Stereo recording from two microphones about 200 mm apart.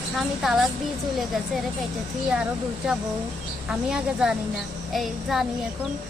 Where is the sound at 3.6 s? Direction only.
5° right (ahead or behind).